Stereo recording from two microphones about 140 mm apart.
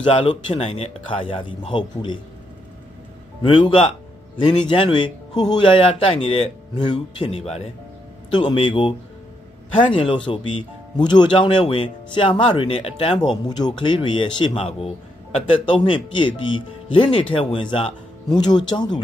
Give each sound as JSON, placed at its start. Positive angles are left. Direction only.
{"t": 0.1, "sound": "speech", "side_deg": 40}
{"t": 3.4, "sound": "speech", "side_deg": 40}
{"t": 8.3, "sound": "speech", "side_deg": 35}
{"t": 9.9, "sound": "speech", "side_deg": 35}
{"t": 13.5, "sound": "speech", "side_deg": 30}